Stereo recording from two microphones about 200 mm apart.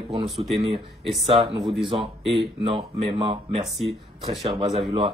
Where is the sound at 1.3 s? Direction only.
25° right (ahead or behind).